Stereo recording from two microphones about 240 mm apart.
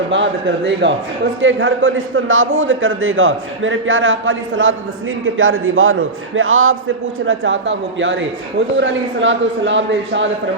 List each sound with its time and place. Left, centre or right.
0.1 s a man's voice: right